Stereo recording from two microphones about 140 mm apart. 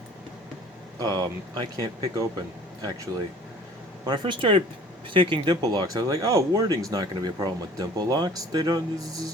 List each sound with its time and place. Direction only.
0.9 s speech: 25° right (ahead or behind)
4.0 s speech: 35° right (ahead or behind)